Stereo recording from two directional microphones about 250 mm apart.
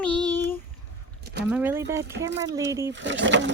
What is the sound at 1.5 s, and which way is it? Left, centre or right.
Speech, centre.